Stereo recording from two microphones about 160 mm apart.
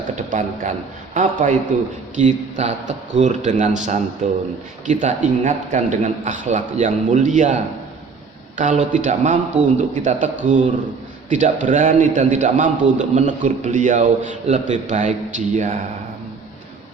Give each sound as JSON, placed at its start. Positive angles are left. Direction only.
{"t": 0.2, "sound": "a man's voice", "side_deg": -55}